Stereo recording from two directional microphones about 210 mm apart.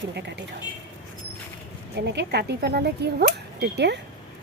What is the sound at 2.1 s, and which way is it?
Speech, 50° right (ahead or behind).